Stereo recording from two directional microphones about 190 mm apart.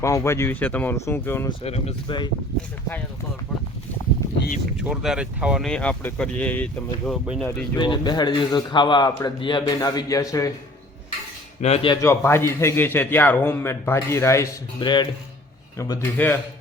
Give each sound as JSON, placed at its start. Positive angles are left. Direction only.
{"t": 0.0, "sound": "a man's voice", "side_deg": 15}
{"t": 1.5, "sound": "a man's voice", "side_deg": 35}
{"t": 4.8, "sound": "speech", "side_deg": -5}
{"t": 7.8, "sound": "a man's voice", "side_deg": 25}
{"t": 11.6, "sound": "speech", "side_deg": 30}
{"t": 12.0, "sound": "a man's voice", "side_deg": 15}